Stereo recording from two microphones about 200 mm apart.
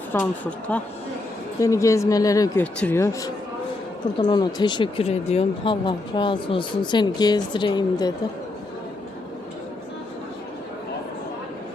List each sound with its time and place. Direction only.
0.1 s speech: 10° left (ahead or behind)